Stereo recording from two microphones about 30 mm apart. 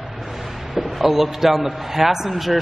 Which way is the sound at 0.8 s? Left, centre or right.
Centre.